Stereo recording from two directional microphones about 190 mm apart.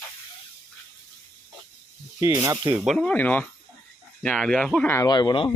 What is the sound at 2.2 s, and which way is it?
Speech, 15° right (ahead or behind).